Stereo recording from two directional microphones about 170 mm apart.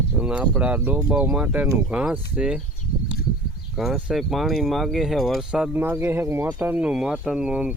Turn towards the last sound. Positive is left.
turn(degrees=-5)  # may be behind; listen again after turning